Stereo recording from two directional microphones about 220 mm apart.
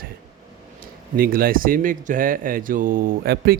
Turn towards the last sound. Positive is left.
turn(degrees=-40)  # may be behind; listen again after turning